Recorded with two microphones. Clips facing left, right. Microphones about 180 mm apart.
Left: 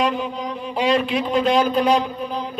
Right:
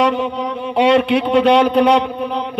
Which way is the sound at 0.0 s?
75° right (ahead or behind).